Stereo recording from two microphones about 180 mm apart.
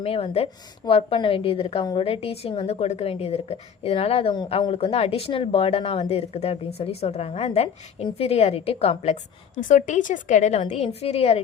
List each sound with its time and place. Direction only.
0.0 s a woman's voice: 35° left (ahead or behind)